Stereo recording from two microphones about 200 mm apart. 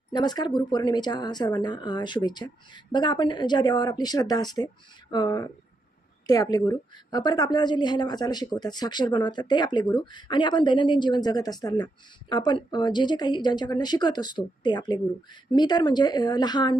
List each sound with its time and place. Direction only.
0.1 s a woman's voice: 20° left (ahead or behind)